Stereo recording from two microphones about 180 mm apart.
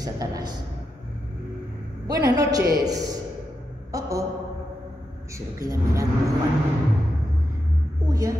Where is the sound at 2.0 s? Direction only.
20° right (ahead or behind).